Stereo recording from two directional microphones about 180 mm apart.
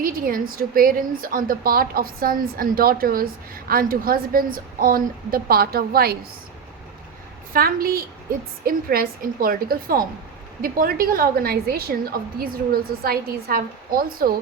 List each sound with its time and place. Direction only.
0.0 s a woman's voice: 50° right (ahead or behind)
7.5 s a woman's voice: 55° right (ahead or behind)